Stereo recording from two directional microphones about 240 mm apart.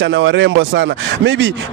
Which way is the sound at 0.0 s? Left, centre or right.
Right.